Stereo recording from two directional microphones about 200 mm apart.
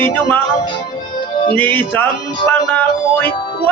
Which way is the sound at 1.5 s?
10° left (ahead or behind).